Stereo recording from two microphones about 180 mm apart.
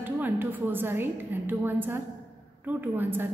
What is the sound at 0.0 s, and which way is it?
A woman's voice, 10° right (ahead or behind).